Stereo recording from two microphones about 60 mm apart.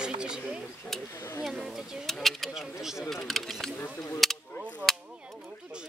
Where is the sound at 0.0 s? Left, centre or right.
Centre.